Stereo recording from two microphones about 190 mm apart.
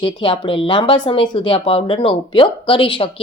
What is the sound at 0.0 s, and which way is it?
A woman's voice, 30° left (ahead or behind).